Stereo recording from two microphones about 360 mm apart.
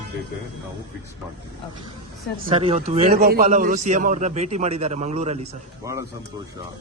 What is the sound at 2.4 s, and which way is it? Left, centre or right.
A man's voice, centre.